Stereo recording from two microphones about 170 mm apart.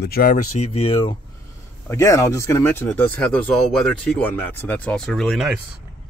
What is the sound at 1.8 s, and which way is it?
Speech, 15° left (ahead or behind).